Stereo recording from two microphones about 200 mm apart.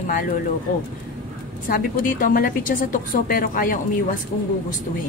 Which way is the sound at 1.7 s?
45° left (ahead or behind).